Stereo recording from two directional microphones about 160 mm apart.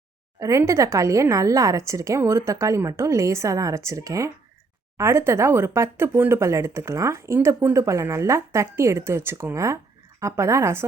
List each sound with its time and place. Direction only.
0.3 s a woman's voice: 20° right (ahead or behind)